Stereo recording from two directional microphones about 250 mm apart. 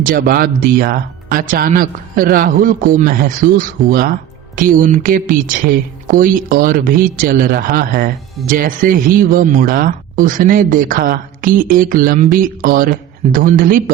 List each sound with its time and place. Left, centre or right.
0.0 s speech: right